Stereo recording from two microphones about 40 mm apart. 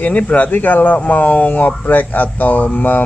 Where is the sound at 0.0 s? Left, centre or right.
Left.